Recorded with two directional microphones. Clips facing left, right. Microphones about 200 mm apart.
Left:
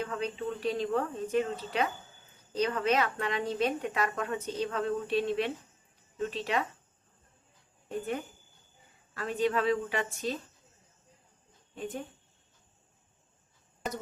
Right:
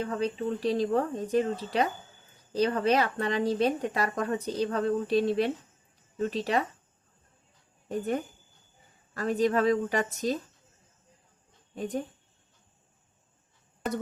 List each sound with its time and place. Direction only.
0.0 s speech: 35° right (ahead or behind)
7.9 s speech: 40° right (ahead or behind)
11.7 s speech: 40° right (ahead or behind)